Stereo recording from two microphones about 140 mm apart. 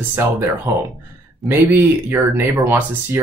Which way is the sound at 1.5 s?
15° right (ahead or behind).